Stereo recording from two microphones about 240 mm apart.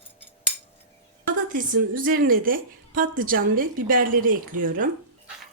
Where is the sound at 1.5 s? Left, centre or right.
Right.